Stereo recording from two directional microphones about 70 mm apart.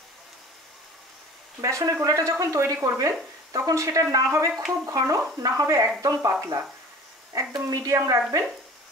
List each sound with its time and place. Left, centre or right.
1.6 s speech: right
7.5 s speech: right